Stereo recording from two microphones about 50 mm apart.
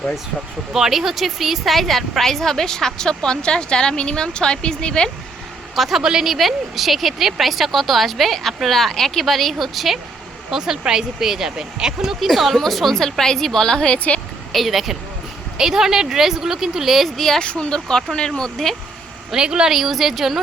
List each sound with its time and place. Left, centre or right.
0.7 s a woman's voice: centre
5.7 s a woman's voice: centre
14.5 s speech: centre
17.4 s a woman's voice: left
19.3 s speech: centre
19.7 s speech: centre